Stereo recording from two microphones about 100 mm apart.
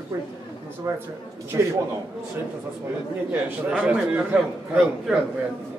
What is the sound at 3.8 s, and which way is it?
Speech, 15° right (ahead or behind).